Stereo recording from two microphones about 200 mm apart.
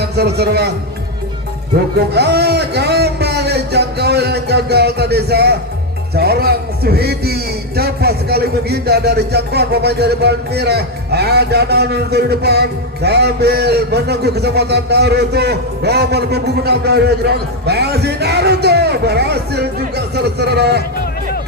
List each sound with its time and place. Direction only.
0.0 s a man's voice: 55° right (ahead or behind)
2.1 s a man's voice: 55° right (ahead or behind)